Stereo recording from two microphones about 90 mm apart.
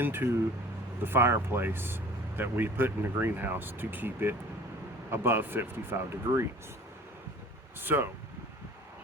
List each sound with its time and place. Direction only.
0.0 s speech: 25° right (ahead or behind)
7.8 s speech: 25° right (ahead or behind)